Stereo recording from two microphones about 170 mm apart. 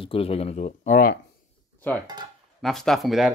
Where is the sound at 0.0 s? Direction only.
35° left (ahead or behind); by 1.1 s 50° left (ahead or behind).